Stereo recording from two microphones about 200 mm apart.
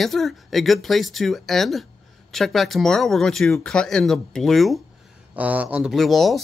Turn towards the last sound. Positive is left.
turn(degrees=0)  # may be behind; listen again after turning